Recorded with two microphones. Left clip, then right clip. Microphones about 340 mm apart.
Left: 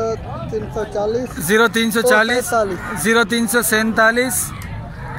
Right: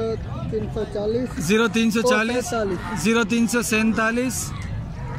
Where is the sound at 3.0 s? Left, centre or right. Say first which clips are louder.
Left 6 dB; centre.